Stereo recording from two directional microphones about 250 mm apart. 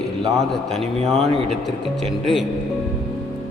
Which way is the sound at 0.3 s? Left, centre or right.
Centre.